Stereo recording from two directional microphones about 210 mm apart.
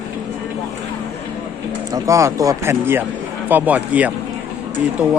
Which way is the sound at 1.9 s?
15° right (ahead or behind).